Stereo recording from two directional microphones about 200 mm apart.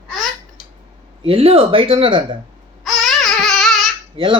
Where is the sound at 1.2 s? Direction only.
30° right (ahead or behind).